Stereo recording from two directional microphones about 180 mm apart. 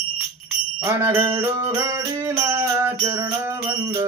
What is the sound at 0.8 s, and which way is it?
Music, 15° right (ahead or behind).